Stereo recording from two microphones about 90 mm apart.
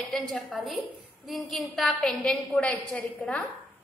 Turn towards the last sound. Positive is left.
turn(degrees=10)  # may be behind; listen again after turning